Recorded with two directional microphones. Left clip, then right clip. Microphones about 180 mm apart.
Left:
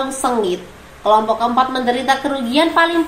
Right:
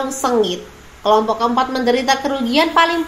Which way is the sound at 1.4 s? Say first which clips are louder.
Left 1 dB; 50° right (ahead or behind).